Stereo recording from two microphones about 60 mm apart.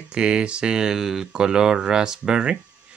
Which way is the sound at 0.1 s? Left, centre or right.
Centre.